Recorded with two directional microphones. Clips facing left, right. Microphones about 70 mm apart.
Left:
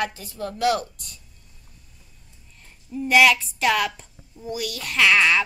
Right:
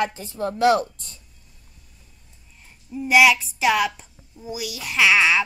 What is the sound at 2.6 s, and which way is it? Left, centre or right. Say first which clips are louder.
A woman's voice: left 1 dB; centre.